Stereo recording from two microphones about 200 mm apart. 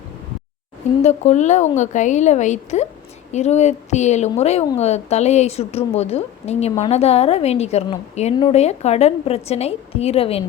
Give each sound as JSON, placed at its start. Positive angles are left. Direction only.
{"t": 1.0, "sound": "a woman's voice", "side_deg": 35}